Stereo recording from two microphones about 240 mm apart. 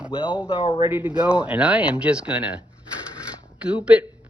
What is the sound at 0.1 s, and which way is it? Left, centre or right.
Speech, centre.